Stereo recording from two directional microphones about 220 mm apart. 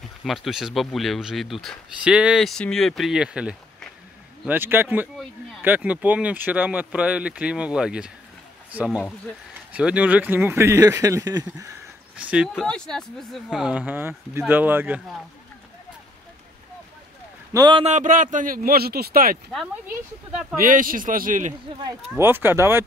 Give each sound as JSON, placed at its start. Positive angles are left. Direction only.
{"t": 0.2, "sound": "speech", "side_deg": 0}
{"t": 12.2, "sound": "speech", "side_deg": -5}
{"t": 17.5, "sound": "a man's voice", "side_deg": -20}
{"t": 19.5, "sound": "speech", "side_deg": 0}
{"t": 20.6, "sound": "a man's voice", "side_deg": -40}
{"t": 22.1, "sound": "speech", "side_deg": -10}